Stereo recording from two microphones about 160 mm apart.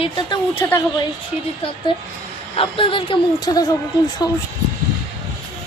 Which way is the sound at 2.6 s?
35° left (ahead or behind).